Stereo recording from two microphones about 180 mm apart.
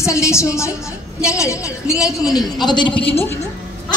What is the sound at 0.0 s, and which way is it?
A woman's voice, 15° left (ahead or behind).